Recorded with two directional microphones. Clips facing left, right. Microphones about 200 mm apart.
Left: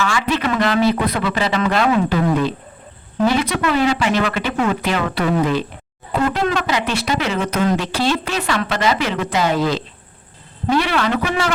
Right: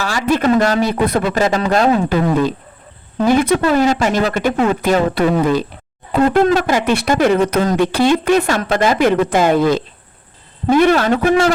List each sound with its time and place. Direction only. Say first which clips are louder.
0.0 s a man's voice: right 4 dB; 40° right (ahead or behind)
3.2 s a man's voice: right 5 dB; 50° right (ahead or behind)